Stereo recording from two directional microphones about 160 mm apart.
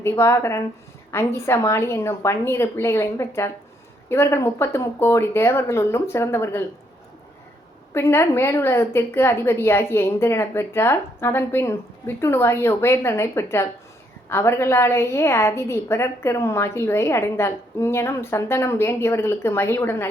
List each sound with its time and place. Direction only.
0.0 s a woman's voice: 15° left (ahead or behind)
7.9 s a woman's voice: 15° left (ahead or behind)